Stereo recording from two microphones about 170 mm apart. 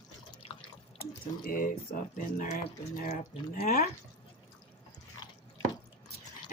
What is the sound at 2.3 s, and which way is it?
Speech, 50° left (ahead or behind).